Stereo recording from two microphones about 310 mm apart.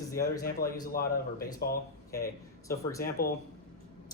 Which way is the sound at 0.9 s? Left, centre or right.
Left.